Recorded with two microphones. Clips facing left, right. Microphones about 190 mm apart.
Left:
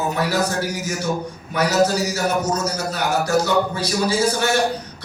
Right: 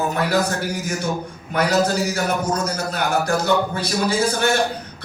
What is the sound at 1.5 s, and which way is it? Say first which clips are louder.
A man's voice: left 1 dB; 55° right (ahead or behind).